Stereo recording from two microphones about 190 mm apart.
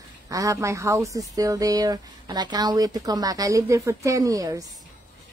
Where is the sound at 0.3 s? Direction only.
15° right (ahead or behind).